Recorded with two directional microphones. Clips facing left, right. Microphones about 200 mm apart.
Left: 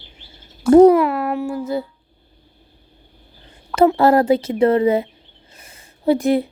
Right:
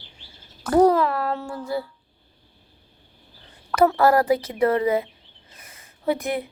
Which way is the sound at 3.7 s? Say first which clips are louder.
Left 4 dB; 25° left (ahead or behind).